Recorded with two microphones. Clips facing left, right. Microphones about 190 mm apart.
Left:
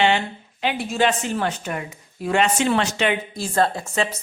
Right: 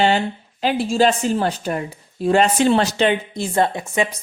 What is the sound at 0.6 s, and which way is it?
Speech, 35° right (ahead or behind).